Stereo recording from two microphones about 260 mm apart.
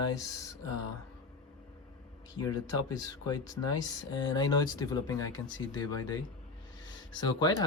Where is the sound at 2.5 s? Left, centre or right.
Centre.